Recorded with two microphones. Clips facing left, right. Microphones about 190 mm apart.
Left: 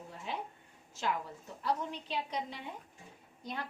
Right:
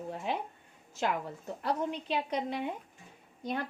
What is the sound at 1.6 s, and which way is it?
A woman's voice, 60° right (ahead or behind).